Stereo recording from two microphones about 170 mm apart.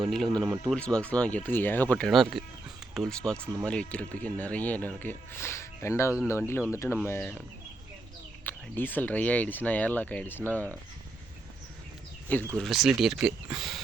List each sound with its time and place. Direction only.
0.0 s speech: centre (ahead or behind)
0.8 s speech: 5° left (ahead or behind)
8.4 s speech: 10° left (ahead or behind)
12.5 s speech: centre (ahead or behind)